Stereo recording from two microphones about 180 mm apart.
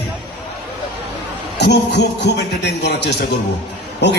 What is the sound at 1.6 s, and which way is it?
A man's voice, 70° left (ahead or behind).